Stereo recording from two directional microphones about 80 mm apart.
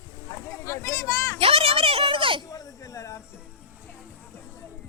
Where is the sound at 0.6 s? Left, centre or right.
Left.